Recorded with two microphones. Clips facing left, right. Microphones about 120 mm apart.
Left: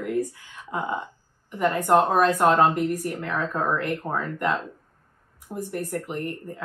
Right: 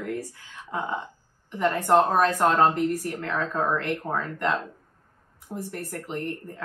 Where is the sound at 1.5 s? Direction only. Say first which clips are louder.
Left 1 dB; 10° left (ahead or behind).